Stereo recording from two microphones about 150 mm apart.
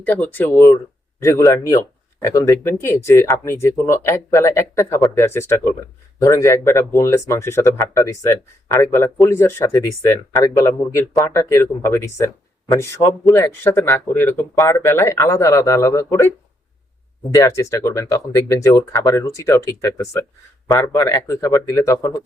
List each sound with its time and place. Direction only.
0.0 s speech: 10° left (ahead or behind)
17.3 s speech: 20° left (ahead or behind)